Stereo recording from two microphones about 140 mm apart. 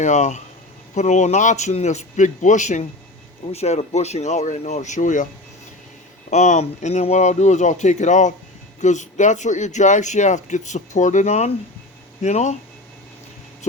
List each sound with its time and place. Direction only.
0.0 s speech: 60° left (ahead or behind)
3.5 s speech: 50° left (ahead or behind); by 5.3 s 65° left (ahead or behind)
6.3 s speech: 55° left (ahead or behind)